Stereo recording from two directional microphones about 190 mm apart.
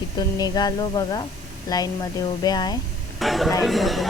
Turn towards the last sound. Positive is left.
turn(degrees=0)  # may be behind; listen again after turning